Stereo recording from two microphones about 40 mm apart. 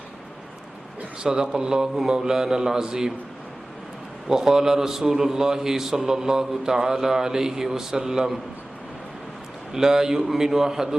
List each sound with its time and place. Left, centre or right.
1.2 s a man's voice: centre
4.3 s a man's voice: centre
9.7 s a man's voice: centre